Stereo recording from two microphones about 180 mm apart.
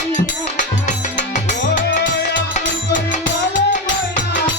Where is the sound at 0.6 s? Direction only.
40° left (ahead or behind).